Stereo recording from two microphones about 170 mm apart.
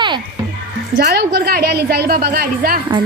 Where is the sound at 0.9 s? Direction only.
70° right (ahead or behind).